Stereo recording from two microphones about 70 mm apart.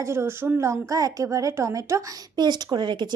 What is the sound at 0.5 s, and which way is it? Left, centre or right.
Speech, right.